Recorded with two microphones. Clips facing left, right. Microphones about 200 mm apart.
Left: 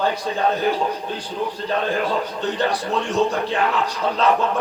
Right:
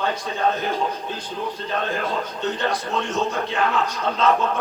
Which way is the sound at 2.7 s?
35° left (ahead or behind).